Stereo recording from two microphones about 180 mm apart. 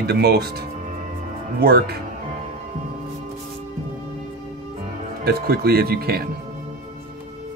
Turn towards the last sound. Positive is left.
turn(degrees=-60)  # may be behind; listen again after turning